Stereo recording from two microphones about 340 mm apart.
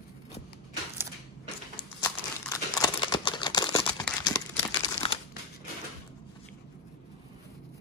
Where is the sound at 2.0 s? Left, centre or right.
Centre.